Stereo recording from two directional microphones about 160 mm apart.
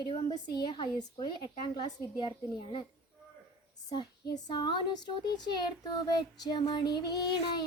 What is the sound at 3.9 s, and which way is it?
Speech, 25° left (ahead or behind).